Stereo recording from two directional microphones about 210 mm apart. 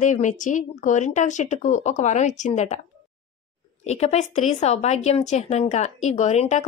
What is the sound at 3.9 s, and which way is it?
Speech, 30° left (ahead or behind).